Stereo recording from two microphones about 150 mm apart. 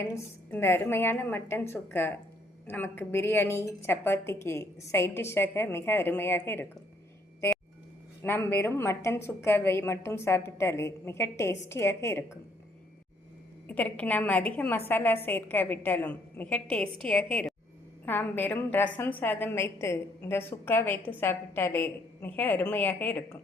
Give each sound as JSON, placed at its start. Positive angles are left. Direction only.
{"t": 0.0, "sound": "a woman's voice", "side_deg": 15}
{"t": 8.2, "sound": "a woman's voice", "side_deg": 15}
{"t": 13.7, "sound": "a woman's voice", "side_deg": 10}